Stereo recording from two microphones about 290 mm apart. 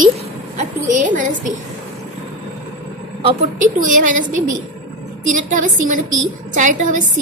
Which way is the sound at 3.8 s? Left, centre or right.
Right.